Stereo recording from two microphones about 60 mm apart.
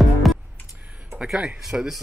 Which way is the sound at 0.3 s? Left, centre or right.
Centre.